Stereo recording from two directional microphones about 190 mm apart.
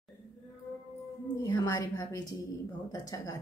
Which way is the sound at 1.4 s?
20° left (ahead or behind).